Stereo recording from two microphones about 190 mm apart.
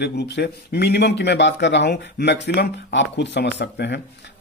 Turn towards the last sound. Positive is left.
turn(degrees=65)  # may be behind; listen again after turning